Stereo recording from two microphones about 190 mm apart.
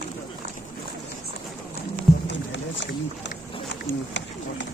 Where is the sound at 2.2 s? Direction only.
70° left (ahead or behind).